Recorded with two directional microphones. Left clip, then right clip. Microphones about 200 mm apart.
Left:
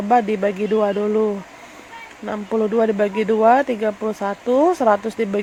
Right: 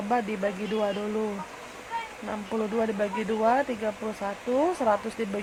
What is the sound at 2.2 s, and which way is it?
Speech, 25° left (ahead or behind).